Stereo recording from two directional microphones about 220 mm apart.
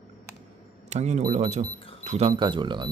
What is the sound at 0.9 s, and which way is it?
Speech, 30° right (ahead or behind).